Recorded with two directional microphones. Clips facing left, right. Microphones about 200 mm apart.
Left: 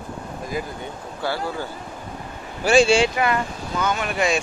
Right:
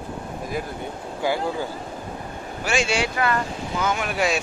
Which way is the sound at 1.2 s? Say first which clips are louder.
Right 2 dB; 15° right (ahead or behind).